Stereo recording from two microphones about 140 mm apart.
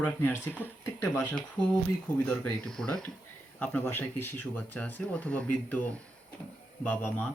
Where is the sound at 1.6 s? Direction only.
35° left (ahead or behind).